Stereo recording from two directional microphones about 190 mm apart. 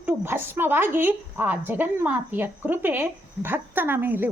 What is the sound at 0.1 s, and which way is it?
A woman's voice, 10° right (ahead or behind).